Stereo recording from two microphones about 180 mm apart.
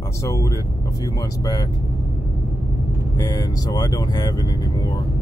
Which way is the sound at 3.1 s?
20° left (ahead or behind).